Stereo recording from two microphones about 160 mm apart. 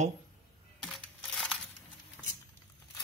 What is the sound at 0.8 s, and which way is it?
Crushing, 5° left (ahead or behind).